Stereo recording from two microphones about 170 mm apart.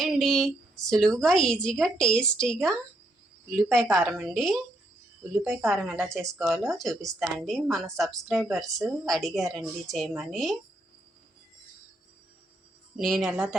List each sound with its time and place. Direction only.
0.0 s a woman's voice: centre (ahead or behind)
13.0 s a woman's voice: centre (ahead or behind)